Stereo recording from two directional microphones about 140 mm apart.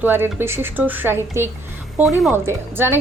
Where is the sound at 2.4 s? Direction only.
15° right (ahead or behind).